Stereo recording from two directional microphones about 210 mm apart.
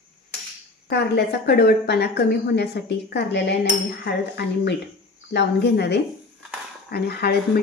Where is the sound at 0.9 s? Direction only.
50° left (ahead or behind).